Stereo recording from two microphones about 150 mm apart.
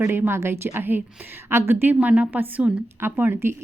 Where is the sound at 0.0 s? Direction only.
15° right (ahead or behind).